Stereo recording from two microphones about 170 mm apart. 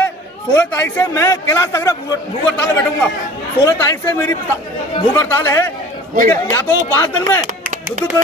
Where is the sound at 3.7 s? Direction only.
15° left (ahead or behind).